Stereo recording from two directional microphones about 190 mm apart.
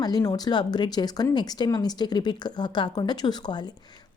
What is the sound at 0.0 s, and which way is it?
Speech, 20° left (ahead or behind).